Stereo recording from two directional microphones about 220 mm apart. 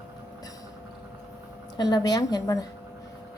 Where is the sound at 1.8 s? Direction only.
15° left (ahead or behind).